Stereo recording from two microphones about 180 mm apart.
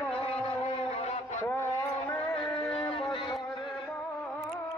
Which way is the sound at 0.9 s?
35° left (ahead or behind).